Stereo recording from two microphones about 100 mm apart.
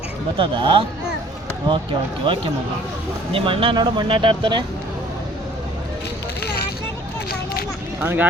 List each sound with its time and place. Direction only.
0.3 s speech: 55° right (ahead or behind)
8.0 s speech: 20° right (ahead or behind)